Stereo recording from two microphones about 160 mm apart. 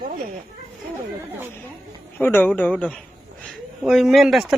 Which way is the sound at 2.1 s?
10° left (ahead or behind).